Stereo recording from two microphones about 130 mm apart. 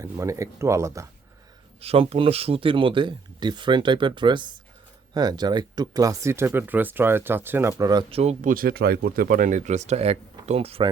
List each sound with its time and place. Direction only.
0.0 s speech: 25° right (ahead or behind)
1.8 s speech: 50° right (ahead or behind); by 7.9 s 20° right (ahead or behind)
8.1 s speech: 55° right (ahead or behind)
8.4 s speech: 90° right
9.3 s speech: 80° right; by 10.8 s 50° right (ahead or behind)